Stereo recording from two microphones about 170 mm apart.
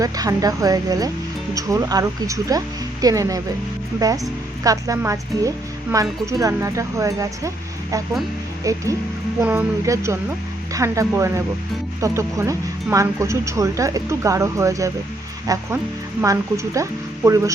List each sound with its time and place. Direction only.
0.0 s speech: 20° right (ahead or behind)